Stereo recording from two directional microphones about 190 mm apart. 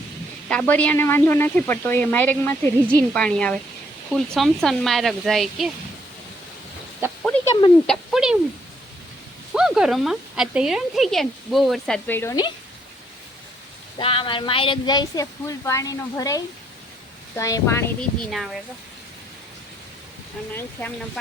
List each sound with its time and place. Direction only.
0.4 s speech: 5° left (ahead or behind)
7.0 s speech: 10° right (ahead or behind)
9.6 s speech: 5° right (ahead or behind); by 12.5 s 15° left (ahead or behind)
14.0 s speech: 30° left (ahead or behind)
18.3 s speech: centre (ahead or behind)
20.5 s speech: 10° left (ahead or behind)